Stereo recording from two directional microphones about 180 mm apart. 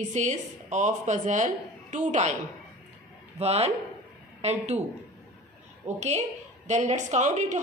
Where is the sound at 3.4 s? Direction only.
35° right (ahead or behind).